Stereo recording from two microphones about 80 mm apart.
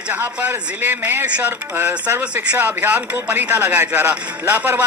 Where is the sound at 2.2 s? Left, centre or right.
Centre.